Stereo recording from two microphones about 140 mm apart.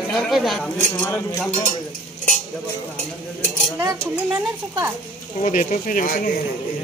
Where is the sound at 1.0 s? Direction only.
15° left (ahead or behind).